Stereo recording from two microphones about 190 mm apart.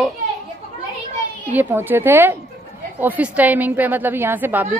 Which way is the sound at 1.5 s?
10° right (ahead or behind).